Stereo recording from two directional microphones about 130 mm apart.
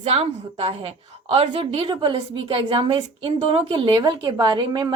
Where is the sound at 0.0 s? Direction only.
50° right (ahead or behind).